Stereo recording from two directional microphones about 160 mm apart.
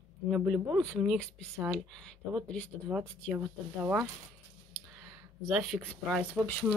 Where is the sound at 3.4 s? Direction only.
15° right (ahead or behind).